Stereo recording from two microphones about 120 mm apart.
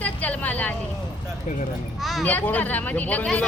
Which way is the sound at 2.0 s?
Centre (ahead or behind).